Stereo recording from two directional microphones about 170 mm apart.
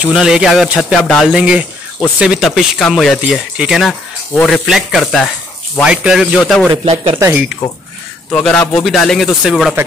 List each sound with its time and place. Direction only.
0.0 s speech: 5° right (ahead or behind)
6.8 s speech: 40° right (ahead or behind)
7.2 s speech: 15° right (ahead or behind)
8.3 s speech: 5° left (ahead or behind)